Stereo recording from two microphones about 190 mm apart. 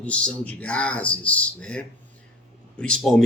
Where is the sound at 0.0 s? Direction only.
5° left (ahead or behind).